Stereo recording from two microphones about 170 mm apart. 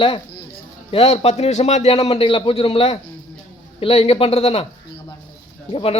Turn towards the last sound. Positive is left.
turn(degrees=30)  # may be behind; listen again after turning